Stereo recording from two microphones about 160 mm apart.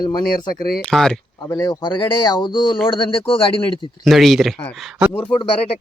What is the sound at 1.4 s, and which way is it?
Speech, 20° left (ahead or behind).